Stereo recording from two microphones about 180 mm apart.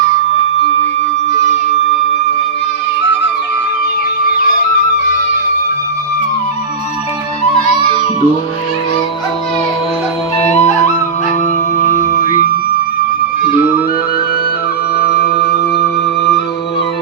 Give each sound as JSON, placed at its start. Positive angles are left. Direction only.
{"t": 10.3, "sound": "flute", "side_deg": 40}
{"t": 11.9, "sound": "music", "side_deg": 45}
{"t": 14.9, "sound": "music", "side_deg": 60}